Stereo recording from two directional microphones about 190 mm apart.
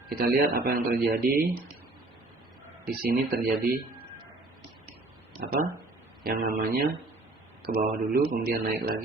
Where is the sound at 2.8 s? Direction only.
55° right (ahead or behind).